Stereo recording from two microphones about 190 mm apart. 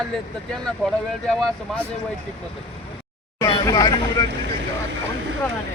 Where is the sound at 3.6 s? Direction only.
20° left (ahead or behind).